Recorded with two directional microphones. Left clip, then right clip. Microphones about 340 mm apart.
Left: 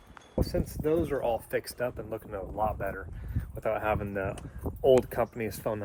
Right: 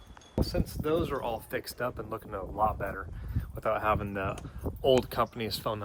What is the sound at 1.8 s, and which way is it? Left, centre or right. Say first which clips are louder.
Speech: left 1 dB; left.